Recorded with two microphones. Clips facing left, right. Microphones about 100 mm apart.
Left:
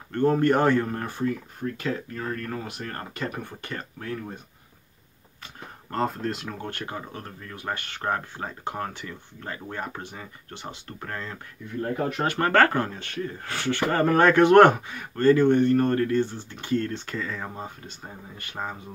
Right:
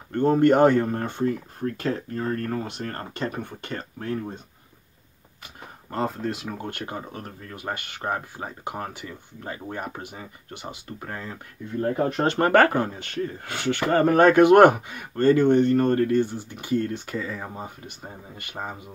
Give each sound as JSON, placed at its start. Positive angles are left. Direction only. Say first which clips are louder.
{"t": 0.1, "sound": "speech", "louder": "right 3 dB", "side_deg": -20}
{"t": 1.2, "sound": "speech", "louder": "right 2 dB", "side_deg": -35}
{"t": 3.3, "sound": "speech", "louder": "right 2 dB", "side_deg": -20}
{"t": 3.7, "sound": "speech", "louder": "right 4 dB", "side_deg": -35}
{"t": 5.9, "sound": "speech", "louder": "even", "side_deg": -5}
{"t": 6.6, "sound": "speech", "louder": "right 1 dB", "side_deg": -20}
{"t": 11.8, "sound": "speech", "louder": "right 3 dB", "side_deg": -35}
{"t": 12.3, "sound": "speech", "louder": "right 2 dB", "side_deg": -20}